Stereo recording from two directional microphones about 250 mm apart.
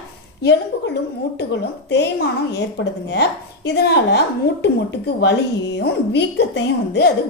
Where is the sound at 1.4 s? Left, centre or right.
Left.